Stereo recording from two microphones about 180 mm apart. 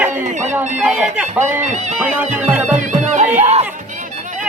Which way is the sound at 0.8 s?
5° right (ahead or behind).